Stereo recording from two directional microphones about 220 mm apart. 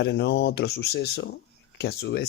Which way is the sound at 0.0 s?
50° left (ahead or behind).